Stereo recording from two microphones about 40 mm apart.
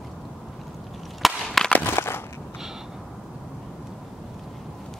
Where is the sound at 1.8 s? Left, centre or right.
Left.